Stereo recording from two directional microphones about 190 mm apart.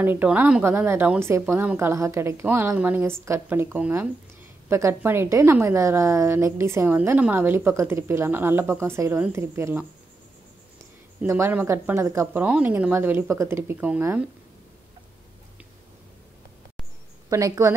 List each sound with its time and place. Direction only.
0.0 s a woman's voice: 10° right (ahead or behind)
11.2 s a woman's voice: 15° right (ahead or behind)
17.3 s a woman's voice: 15° right (ahead or behind)